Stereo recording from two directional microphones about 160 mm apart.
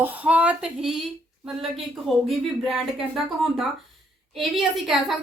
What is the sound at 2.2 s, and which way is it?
Speech, centre (ahead or behind).